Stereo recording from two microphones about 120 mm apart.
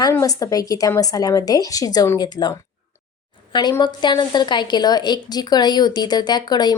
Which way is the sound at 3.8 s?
40° left (ahead or behind).